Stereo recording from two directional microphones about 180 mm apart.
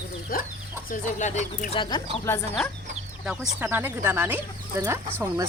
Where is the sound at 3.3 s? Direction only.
10° right (ahead or behind).